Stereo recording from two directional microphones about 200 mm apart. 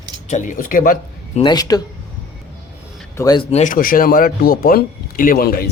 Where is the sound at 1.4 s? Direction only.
20° left (ahead or behind).